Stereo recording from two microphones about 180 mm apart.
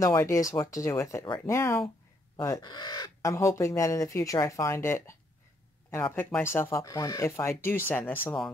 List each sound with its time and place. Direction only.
0.0 s speech: 15° left (ahead or behind)